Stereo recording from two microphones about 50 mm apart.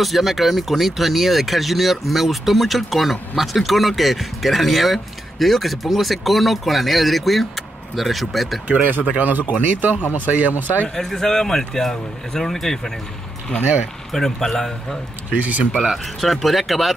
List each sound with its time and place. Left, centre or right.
0.0 s speech: centre
9.2 s speech: right
11.0 s speech: centre
14.1 s speech: centre
15.3 s speech: right
15.7 s speech: centre